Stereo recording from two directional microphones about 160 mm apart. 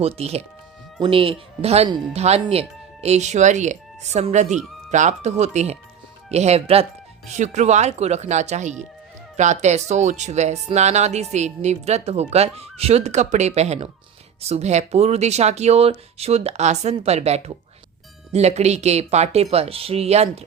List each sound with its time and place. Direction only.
0.0 s speech: 40° right (ahead or behind)